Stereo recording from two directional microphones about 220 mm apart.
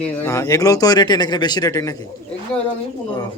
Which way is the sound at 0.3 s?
15° left (ahead or behind).